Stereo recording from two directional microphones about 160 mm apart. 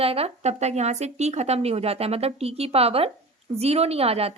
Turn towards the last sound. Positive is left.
turn(degrees=-40)  # may be behind; listen again after turning